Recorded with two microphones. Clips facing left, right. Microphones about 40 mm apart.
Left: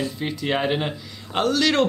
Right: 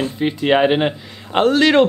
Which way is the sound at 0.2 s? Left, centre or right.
Right.